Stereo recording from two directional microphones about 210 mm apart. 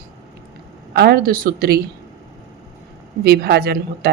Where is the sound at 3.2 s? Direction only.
50° right (ahead or behind).